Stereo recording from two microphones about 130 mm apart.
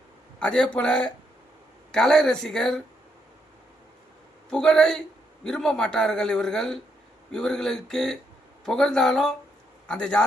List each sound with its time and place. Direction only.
0.3 s a man's voice: 5° left (ahead or behind)
4.4 s a man's voice: 5° left (ahead or behind)